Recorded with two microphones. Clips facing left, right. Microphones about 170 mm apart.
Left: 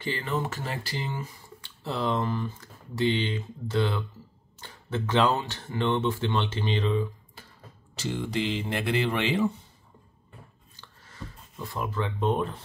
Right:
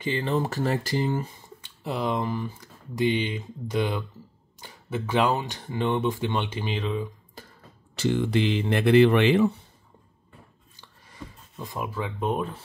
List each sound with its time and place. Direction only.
0.0 s speech: 25° right (ahead or behind); by 1.2 s 45° right (ahead or behind)
1.6 s speech: 15° right (ahead or behind)
8.0 s speech: 60° right (ahead or behind)
10.8 s a sound: 15° right (ahead or behind)